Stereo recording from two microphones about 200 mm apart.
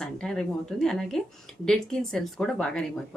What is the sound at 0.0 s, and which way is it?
A woman's voice, 5° left (ahead or behind).